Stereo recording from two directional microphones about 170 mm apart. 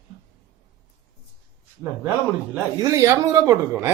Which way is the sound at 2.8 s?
20° right (ahead or behind).